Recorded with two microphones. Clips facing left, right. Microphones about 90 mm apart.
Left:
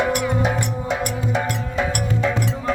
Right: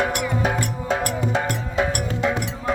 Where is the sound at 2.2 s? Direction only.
20° right (ahead or behind).